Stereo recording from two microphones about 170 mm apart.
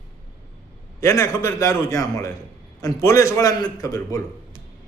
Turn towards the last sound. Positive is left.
turn(degrees=20)  # may be behind; listen again after turning